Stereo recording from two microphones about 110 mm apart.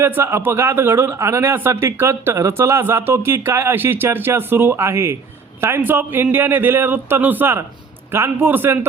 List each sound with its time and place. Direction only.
0.0 s a man's voice: 20° right (ahead or behind)